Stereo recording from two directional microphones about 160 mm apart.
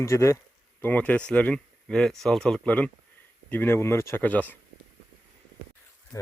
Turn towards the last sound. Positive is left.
turn(degrees=20)  # may be behind; listen again after turning